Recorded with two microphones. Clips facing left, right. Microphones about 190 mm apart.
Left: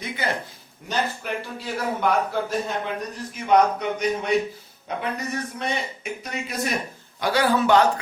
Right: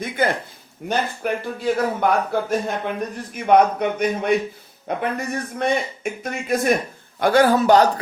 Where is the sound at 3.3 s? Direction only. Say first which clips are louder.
Right 3 dB; 55° right (ahead or behind).